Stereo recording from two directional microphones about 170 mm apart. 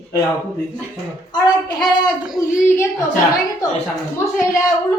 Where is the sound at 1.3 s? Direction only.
25° left (ahead or behind).